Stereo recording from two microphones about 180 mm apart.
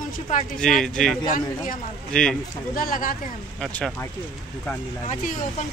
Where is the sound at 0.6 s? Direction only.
5° left (ahead or behind).